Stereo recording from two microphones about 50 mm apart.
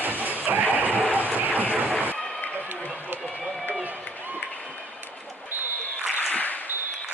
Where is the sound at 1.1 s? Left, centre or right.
Right.